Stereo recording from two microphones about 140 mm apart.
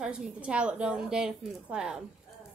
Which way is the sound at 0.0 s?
5° right (ahead or behind).